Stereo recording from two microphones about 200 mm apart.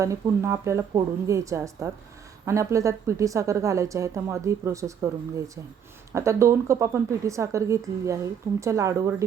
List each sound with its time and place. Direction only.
0.0 s a woman's voice: 15° right (ahead or behind)
6.1 s a woman's voice: 15° right (ahead or behind)